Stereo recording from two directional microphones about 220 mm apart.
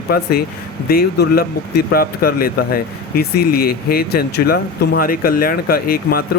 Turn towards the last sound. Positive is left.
turn(degrees=40)  # may be behind; listen again after turning